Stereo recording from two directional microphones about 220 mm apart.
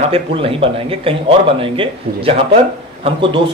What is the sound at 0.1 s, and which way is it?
A man's voice, 25° right (ahead or behind).